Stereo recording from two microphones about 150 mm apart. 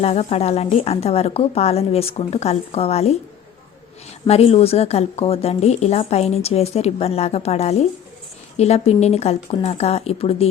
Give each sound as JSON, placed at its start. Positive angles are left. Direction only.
{"t": 0.0, "sound": "speech", "side_deg": 45}
{"t": 4.3, "sound": "speech", "side_deg": 45}